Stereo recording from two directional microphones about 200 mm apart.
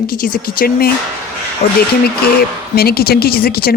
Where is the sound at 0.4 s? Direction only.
50° left (ahead or behind).